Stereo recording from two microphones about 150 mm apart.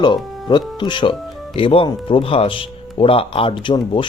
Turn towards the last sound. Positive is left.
turn(degrees=35)  # may be behind; listen again after turning